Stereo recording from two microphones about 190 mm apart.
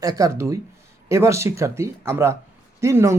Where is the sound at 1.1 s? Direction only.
15° right (ahead or behind).